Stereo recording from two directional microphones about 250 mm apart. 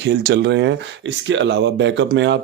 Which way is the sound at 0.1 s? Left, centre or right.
Right.